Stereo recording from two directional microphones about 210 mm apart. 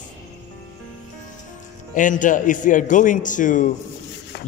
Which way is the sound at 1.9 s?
40° left (ahead or behind).